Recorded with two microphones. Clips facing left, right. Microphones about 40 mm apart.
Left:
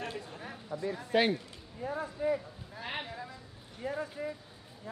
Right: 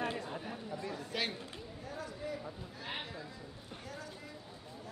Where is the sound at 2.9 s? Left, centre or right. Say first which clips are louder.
Left 4 dB; centre.